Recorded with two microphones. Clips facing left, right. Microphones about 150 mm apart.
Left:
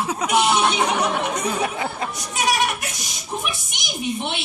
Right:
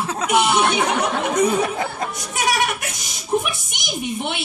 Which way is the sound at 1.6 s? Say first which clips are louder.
Right 1 dB; 40° right (ahead or behind).